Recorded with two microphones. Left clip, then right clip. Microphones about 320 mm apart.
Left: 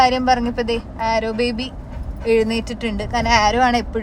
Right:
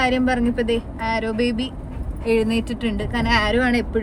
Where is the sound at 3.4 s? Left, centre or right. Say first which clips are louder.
Left 5 dB; left.